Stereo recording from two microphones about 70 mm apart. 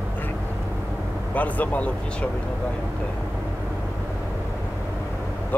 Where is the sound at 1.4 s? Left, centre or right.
Left.